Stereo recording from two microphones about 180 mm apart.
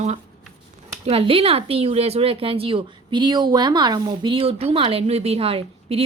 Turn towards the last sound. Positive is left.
turn(degrees=-35)  # may be behind; listen again after turning